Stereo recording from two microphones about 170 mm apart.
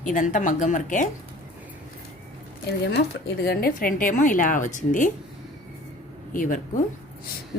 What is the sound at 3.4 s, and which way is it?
A woman's voice, 65° left (ahead or behind).